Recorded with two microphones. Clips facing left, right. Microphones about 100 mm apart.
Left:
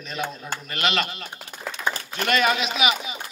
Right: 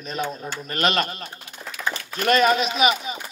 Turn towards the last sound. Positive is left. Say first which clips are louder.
# right 3 dB
turn(degrees=-40)  # may be behind; listen again after turning